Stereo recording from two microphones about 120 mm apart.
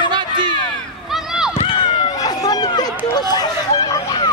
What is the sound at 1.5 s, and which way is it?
Run, 45° left (ahead or behind).